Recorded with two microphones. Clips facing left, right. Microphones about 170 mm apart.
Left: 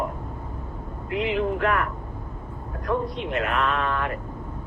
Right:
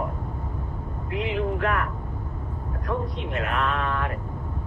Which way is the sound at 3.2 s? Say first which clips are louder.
Left 2 dB; 90° left.